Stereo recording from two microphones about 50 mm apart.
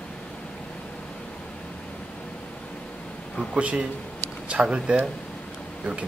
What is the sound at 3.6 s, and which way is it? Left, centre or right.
Speech, right.